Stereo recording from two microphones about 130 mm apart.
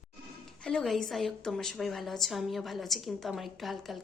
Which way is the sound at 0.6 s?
5° left (ahead or behind).